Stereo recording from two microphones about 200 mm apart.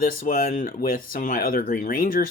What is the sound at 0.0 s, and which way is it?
Speech, 45° left (ahead or behind).